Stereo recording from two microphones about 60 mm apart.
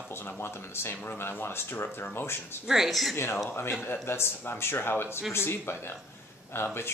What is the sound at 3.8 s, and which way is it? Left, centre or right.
Speech, left.